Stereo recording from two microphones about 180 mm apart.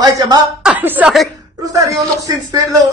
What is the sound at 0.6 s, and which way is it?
Speech, 10° right (ahead or behind).